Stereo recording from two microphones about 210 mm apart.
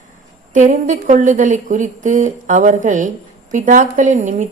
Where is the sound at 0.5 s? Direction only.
35° right (ahead or behind).